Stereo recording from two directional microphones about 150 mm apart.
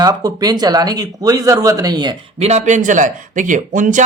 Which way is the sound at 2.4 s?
45° right (ahead or behind).